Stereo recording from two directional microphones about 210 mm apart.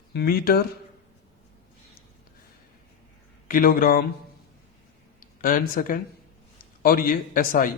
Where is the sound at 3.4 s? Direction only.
40° left (ahead or behind).